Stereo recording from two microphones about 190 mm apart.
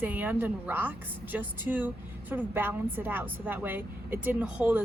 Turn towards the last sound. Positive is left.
turn(degrees=-5)  # may be behind; listen again after turning